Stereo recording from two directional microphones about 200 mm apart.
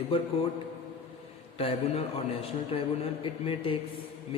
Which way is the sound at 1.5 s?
30° left (ahead or behind).